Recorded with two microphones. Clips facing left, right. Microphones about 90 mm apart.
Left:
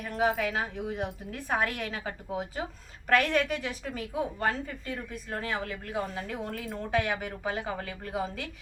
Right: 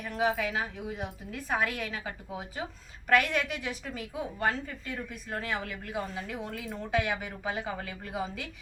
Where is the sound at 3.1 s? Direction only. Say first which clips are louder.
Left 1 dB; 40° left (ahead or behind).